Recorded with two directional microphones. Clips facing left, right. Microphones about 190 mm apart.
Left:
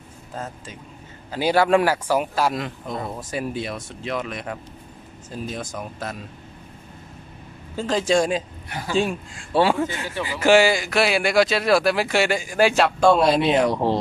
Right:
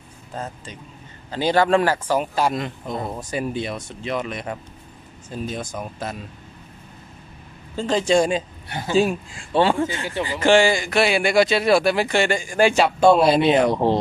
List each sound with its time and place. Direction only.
0.3 s speech: centre (ahead or behind)
7.7 s speech: centre (ahead or behind)
8.6 s speech: 25° right (ahead or behind)
8.9 s speech: centre (ahead or behind)